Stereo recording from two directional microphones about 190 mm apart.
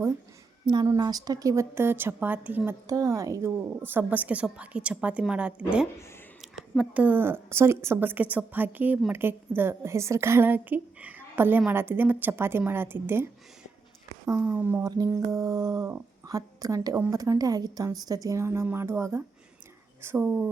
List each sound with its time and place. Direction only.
0.6 s a woman's voice: 25° right (ahead or behind)